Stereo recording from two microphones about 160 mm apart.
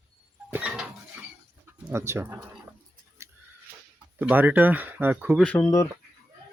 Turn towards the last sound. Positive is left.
turn(degrees=15)  # may be behind; listen again after turning